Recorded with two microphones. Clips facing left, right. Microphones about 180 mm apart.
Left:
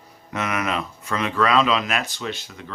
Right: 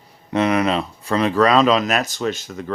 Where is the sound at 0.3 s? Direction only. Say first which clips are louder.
Right 8 dB; 30° right (ahead or behind).